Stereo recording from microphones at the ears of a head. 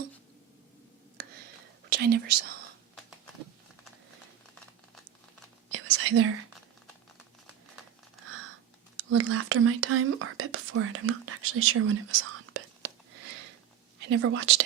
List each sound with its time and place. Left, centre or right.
1.1 s whispering: right
5.6 s whispering: right
8.2 s a sound: right
9.0 s speech: right